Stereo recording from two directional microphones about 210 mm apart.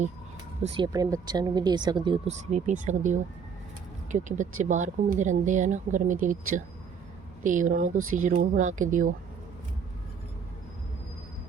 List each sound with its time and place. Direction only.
0.6 s speech: 30° right (ahead or behind)
0.9 s speech: 20° right (ahead or behind); by 9.1 s 40° right (ahead or behind)